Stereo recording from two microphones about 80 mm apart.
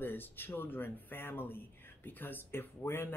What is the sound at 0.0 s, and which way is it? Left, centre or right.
Speech, left.